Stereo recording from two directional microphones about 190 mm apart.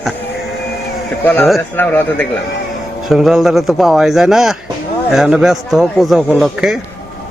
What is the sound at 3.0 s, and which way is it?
A man's voice, centre (ahead or behind).